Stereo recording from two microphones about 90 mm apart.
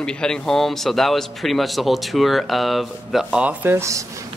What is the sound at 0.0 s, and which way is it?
Speech, 10° left (ahead or behind).